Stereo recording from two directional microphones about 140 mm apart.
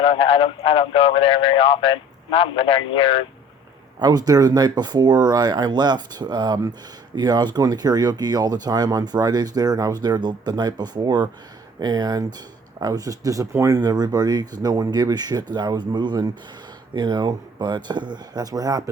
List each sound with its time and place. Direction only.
0.0 s speech: 40° left (ahead or behind)
4.0 s speech: 30° right (ahead or behind)